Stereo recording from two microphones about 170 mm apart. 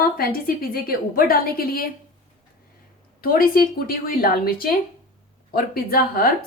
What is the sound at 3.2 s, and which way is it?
Speech, 60° left (ahead or behind).